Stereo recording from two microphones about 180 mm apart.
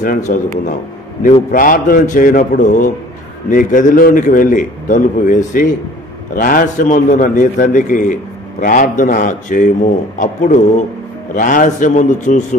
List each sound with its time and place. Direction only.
0.0 s a man's voice: 45° left (ahead or behind)